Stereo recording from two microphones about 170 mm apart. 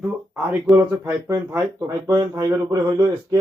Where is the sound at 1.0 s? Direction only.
15° right (ahead or behind).